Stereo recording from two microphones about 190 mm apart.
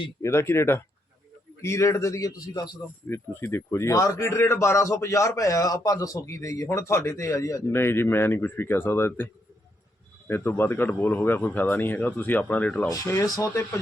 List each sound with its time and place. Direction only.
0.0 s a man's voice: 15° left (ahead or behind)
12.9 s a man's voice: 15° left (ahead or behind)